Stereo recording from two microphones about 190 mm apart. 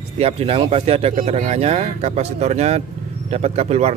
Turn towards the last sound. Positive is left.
turn(degrees=-35)  # may be behind; listen again after turning